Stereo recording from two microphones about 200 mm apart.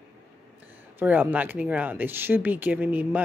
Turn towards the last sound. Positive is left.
turn(degrees=-10)  # may be behind; listen again after turning